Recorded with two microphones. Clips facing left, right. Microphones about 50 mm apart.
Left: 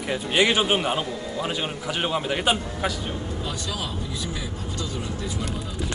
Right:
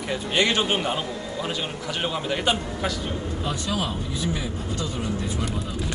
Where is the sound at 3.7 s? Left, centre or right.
Right.